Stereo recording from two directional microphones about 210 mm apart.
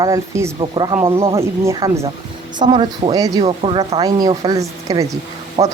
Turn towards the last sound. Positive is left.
turn(degrees=-25)  # may be behind; listen again after turning